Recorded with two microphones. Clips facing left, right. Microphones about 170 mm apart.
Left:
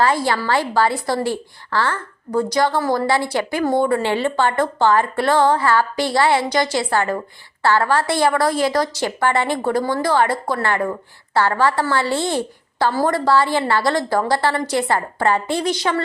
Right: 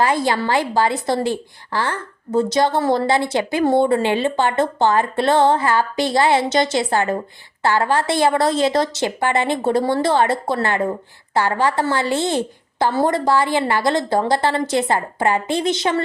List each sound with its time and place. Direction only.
0.0 s a woman's voice: 20° right (ahead or behind)